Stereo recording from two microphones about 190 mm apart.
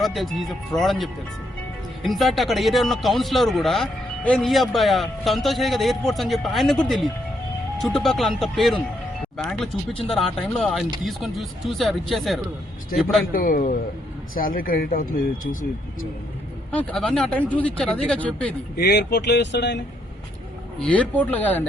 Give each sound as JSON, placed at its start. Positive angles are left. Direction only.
{"t": 0.0, "sound": "speech", "side_deg": 0}
{"t": 13.3, "sound": "speech", "side_deg": 45}
{"t": 16.7, "sound": "speech", "side_deg": 5}
{"t": 18.8, "sound": "speech", "side_deg": 60}
{"t": 20.8, "sound": "speech", "side_deg": 5}